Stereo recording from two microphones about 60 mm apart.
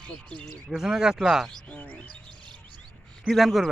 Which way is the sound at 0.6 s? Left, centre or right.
Centre.